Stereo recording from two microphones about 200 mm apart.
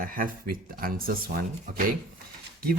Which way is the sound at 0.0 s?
45° right (ahead or behind).